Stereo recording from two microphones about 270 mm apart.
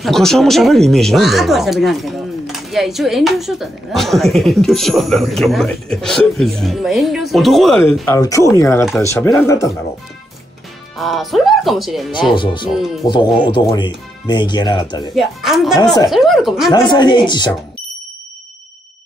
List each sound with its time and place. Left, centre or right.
0.0 s speech: centre
11.0 s speech: centre
12.4 s speech: centre
15.1 s speech: centre
15.8 s speech: centre
16.1 s speech: centre
16.7 s speech: centre